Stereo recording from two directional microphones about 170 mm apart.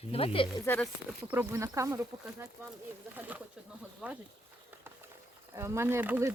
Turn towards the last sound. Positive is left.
turn(degrees=-10)  # may be behind; listen again after turning